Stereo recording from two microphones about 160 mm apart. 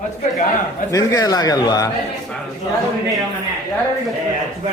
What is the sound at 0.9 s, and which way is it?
A man's voice, 20° left (ahead or behind).